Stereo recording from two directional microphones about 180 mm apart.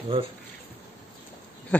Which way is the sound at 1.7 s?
10° left (ahead or behind).